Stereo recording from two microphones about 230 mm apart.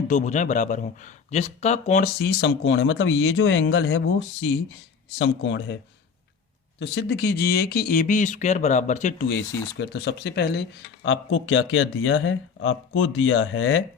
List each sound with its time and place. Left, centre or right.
0.1 s speech: left
6.7 s speech: left
9.3 s speech: left